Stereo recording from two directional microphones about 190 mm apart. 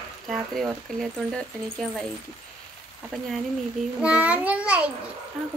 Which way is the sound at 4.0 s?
5° right (ahead or behind).